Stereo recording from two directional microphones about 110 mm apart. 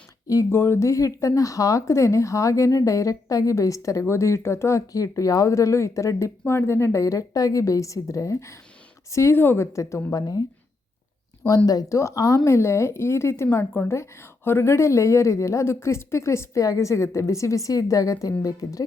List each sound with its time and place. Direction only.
0.3 s speech: 25° left (ahead or behind)
11.4 s speech: 35° left (ahead or behind)